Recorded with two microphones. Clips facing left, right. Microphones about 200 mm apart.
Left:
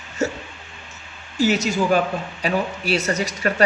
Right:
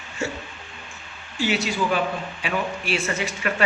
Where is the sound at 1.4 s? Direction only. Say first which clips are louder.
Left 4 dB; 40° left (ahead or behind).